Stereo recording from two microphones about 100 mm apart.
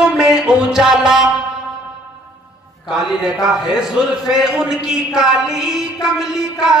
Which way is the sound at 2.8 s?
5° right (ahead or behind).